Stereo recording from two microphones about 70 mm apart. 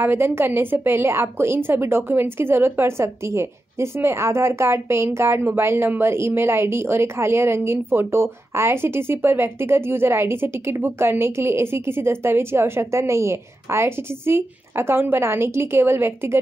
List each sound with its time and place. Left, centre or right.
0.0 s speech: right